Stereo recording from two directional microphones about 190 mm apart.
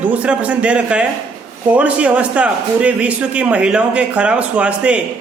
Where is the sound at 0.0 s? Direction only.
5° right (ahead or behind).